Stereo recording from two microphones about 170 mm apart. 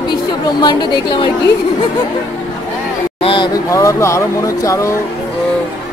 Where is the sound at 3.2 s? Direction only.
30° left (ahead or behind).